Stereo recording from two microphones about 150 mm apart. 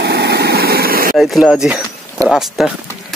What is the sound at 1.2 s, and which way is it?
Speech, centre (ahead or behind).